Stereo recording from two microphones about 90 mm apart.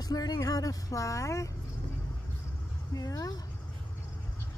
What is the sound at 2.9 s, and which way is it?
Speech, 45° left (ahead or behind).